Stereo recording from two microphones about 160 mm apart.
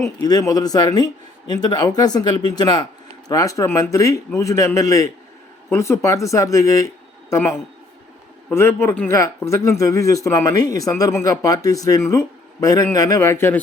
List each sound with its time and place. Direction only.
0.0 s a man's voice: 25° left (ahead or behind)